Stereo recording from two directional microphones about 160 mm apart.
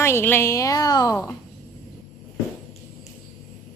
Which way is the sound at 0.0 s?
15° left (ahead or behind).